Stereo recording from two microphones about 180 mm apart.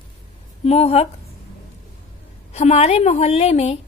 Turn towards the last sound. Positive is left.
turn(degrees=35)  # may be behind; listen again after turning